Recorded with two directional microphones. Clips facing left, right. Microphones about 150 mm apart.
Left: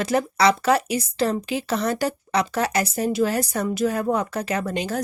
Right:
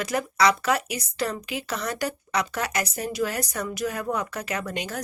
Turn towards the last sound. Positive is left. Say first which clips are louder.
# left 6 dB
turn(degrees=30)  # may be behind; listen again after turning